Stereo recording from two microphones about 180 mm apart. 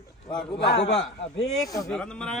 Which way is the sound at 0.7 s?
70° left (ahead or behind).